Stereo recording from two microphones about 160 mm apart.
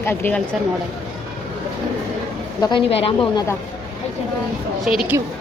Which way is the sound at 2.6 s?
35° left (ahead or behind).